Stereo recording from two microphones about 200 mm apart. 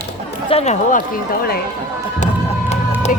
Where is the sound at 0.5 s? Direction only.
35° left (ahead or behind).